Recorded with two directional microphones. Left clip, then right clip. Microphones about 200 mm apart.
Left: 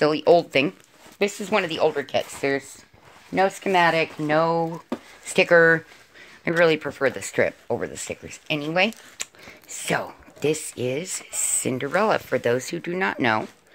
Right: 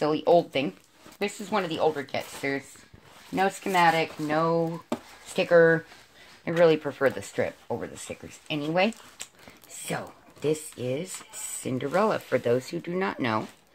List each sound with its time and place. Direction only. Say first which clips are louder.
0.0 s speech: left 4 dB; 50° left (ahead or behind)